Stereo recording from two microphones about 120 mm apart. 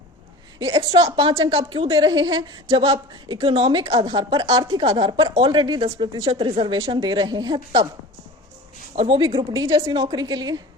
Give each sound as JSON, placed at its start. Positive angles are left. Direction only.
{"t": 0.6, "sound": "speech", "side_deg": -30}
{"t": 0.9, "sound": "speech", "side_deg": -50}
{"t": 1.3, "sound": "speech", "side_deg": -30}
{"t": 2.8, "sound": "speech", "side_deg": -50}
{"t": 4.7, "sound": "speech", "side_deg": -50}
{"t": 9.0, "sound": "speech", "side_deg": -40}